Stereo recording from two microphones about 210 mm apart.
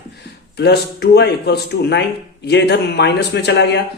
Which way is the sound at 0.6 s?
55° left (ahead or behind).